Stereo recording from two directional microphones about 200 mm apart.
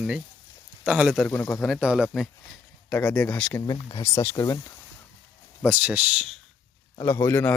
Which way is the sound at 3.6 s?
20° left (ahead or behind).